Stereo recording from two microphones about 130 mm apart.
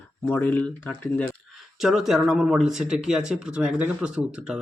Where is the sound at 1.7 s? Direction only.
Centre (ahead or behind).